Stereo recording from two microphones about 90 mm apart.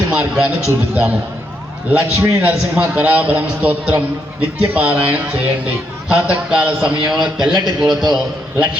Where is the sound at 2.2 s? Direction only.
20° right (ahead or behind).